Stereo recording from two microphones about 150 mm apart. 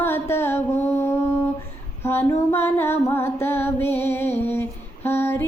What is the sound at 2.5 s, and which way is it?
Music, 15° left (ahead or behind).